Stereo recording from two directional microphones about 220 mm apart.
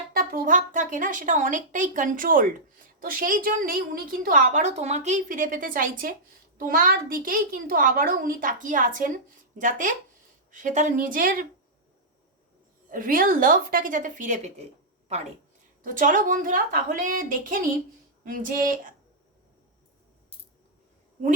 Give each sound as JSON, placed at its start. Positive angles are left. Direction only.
{"t": 0.2, "sound": "a woman's voice", "side_deg": -40}
{"t": 12.9, "sound": "a woman's voice", "side_deg": -40}
{"t": 15.8, "sound": "a woman's voice", "side_deg": -35}